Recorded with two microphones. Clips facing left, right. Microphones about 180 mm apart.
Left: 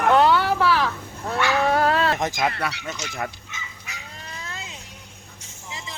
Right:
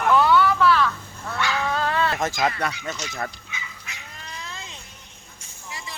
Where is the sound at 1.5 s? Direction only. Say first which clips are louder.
Left 7 dB; 60° left (ahead or behind).